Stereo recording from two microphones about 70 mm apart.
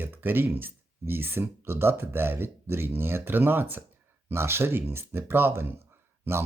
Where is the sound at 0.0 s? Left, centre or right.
Right.